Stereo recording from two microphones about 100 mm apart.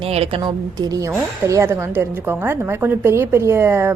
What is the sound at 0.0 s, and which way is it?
Speech, 75° right (ahead or behind).